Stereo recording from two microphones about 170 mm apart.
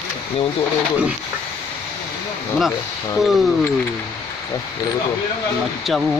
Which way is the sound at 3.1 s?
Centre (ahead or behind).